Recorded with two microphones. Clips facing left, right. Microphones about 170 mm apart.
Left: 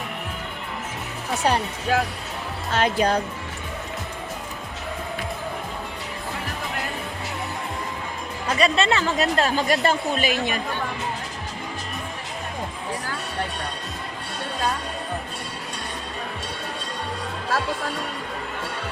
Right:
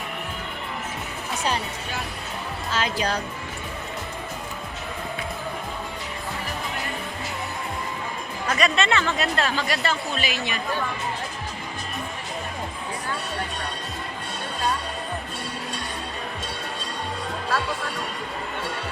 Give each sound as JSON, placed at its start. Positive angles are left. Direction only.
{"t": 1.9, "sound": "speech", "side_deg": 90}
{"t": 2.7, "sound": "speech", "side_deg": 55}
{"t": 8.4, "sound": "speech", "side_deg": 30}